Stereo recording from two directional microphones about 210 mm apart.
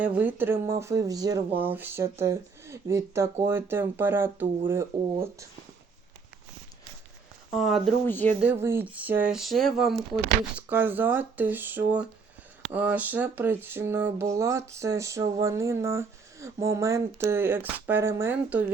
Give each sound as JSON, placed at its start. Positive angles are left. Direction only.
{"t": 0.0, "sound": "speech", "side_deg": -5}
{"t": 7.5, "sound": "speech", "side_deg": 0}
{"t": 8.4, "sound": "speech", "side_deg": -10}